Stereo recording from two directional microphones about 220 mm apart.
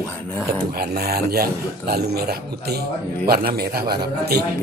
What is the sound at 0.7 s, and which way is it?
Speech, 45° right (ahead or behind).